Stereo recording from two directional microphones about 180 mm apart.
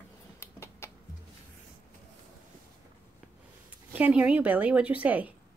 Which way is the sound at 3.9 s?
10° right (ahead or behind).